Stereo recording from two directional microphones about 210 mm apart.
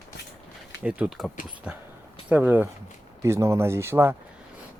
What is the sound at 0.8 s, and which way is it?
Speech, 5° right (ahead or behind).